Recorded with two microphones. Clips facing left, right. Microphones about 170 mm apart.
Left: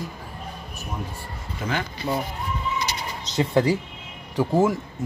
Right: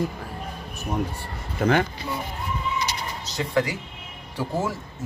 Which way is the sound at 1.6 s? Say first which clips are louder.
Right 7 dB; 55° right (ahead or behind).